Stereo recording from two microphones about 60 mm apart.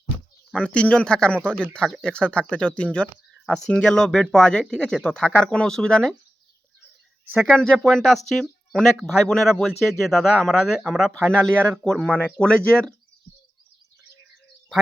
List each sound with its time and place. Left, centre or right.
0.5 s speech: centre
7.5 s speech: centre